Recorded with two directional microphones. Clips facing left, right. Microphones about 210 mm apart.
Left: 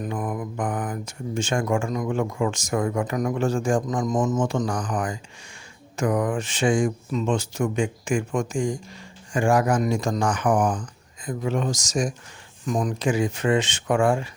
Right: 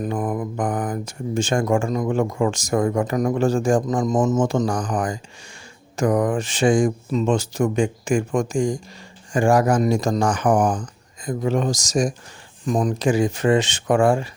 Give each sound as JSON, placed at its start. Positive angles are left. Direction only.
{"t": 0.0, "sound": "mantra", "side_deg": -30}
{"t": 0.3, "sound": "speech", "side_deg": -45}
{"t": 10.5, "sound": "speech", "side_deg": -45}